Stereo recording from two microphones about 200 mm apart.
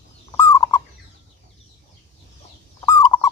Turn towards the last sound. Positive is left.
turn(degrees=15)  # may be behind; listen again after turning